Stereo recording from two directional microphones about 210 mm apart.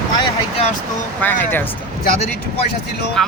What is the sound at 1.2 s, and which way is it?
Speech, 10° left (ahead or behind).